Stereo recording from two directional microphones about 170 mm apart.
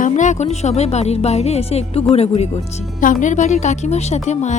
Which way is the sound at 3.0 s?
50° left (ahead or behind).